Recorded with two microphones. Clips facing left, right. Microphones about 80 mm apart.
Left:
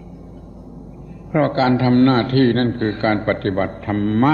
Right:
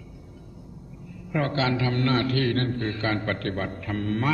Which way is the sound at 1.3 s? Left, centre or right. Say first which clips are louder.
Left 9 dB; left.